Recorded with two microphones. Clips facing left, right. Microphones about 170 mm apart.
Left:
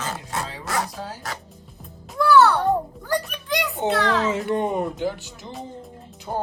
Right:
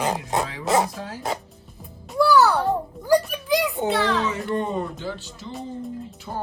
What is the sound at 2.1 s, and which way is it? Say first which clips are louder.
Music: left 1 dB; centre (ahead or behind).